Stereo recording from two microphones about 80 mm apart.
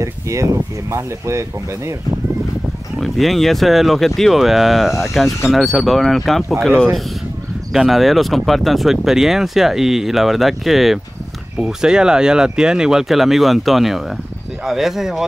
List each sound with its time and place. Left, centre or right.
0.0 s speech: right
3.0 s speech: centre
7.7 s speech: centre